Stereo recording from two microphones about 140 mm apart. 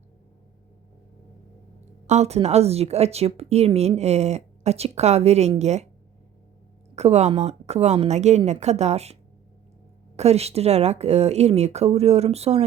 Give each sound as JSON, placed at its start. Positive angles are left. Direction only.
{"t": 2.0, "sound": "speech", "side_deg": -50}
{"t": 6.9, "sound": "speech", "side_deg": -50}
{"t": 10.2, "sound": "speech", "side_deg": -50}